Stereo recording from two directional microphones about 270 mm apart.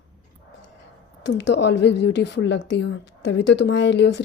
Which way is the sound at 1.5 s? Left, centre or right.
Left.